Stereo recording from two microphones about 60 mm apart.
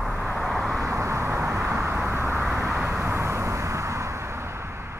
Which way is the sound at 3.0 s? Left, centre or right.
Right.